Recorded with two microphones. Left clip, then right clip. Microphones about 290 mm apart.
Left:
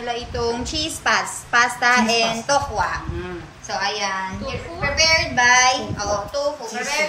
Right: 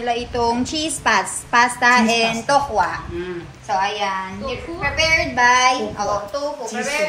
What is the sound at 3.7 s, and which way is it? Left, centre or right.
Speech, centre.